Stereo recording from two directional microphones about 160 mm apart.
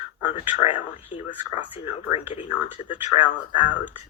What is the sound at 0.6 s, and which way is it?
Speech, 35° left (ahead or behind).